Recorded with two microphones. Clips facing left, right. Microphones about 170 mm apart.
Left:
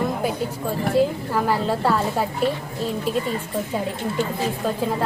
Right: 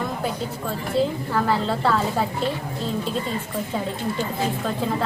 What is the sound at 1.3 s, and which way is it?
Speech, 10° left (ahead or behind).